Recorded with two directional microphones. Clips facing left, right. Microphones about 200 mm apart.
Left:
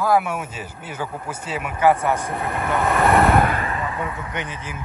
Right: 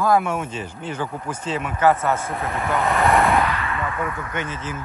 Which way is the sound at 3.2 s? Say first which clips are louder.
Left 2 dB; 55° left (ahead or behind).